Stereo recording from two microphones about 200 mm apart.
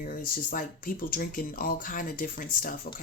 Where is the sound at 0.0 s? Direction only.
45° left (ahead or behind).